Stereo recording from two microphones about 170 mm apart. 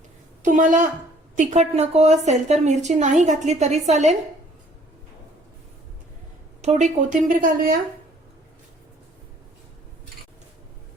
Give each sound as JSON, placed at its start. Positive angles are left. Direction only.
{"t": 0.4, "sound": "a woman's voice", "side_deg": -50}
{"t": 6.6, "sound": "a woman's voice", "side_deg": -45}